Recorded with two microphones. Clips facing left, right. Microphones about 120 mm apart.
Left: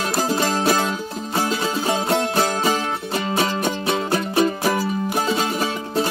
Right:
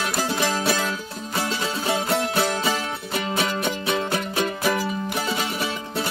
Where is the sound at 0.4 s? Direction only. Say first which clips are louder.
Left 3 dB; 40° left (ahead or behind).